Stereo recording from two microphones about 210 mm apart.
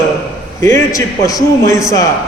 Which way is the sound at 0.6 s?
15° left (ahead or behind).